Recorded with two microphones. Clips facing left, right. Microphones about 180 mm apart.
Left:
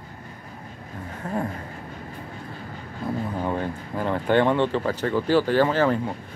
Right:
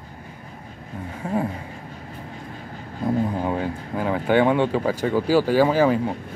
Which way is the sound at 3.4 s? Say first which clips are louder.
Right 2 dB; 10° right (ahead or behind).